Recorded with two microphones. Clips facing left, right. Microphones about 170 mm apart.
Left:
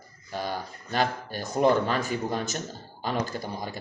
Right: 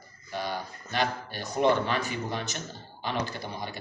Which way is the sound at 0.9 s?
45° left (ahead or behind).